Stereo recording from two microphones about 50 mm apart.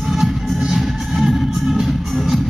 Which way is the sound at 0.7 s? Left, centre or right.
Centre.